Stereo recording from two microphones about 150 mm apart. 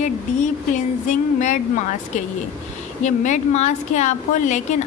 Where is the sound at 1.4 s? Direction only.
55° left (ahead or behind).